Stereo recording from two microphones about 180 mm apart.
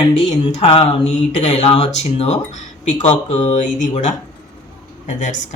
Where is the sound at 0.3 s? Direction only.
35° left (ahead or behind).